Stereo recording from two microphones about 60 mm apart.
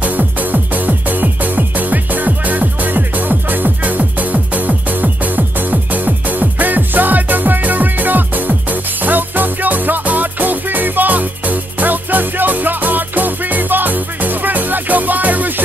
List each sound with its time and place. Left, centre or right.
0.0 s music: right